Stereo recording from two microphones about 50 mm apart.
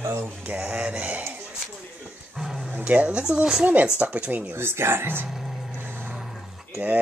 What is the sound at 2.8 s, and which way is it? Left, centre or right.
Speech, right.